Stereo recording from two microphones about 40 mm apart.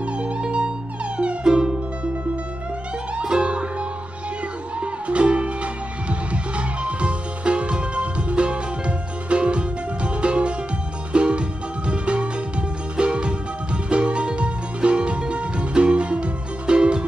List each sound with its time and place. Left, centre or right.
0.0 s music: right
3.2 s music: right
4.7 s music: right